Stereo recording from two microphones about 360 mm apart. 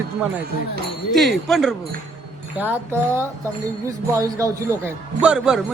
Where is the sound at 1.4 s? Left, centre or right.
Centre.